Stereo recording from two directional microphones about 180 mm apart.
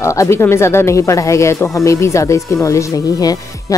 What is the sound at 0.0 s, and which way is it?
Speech, 15° left (ahead or behind).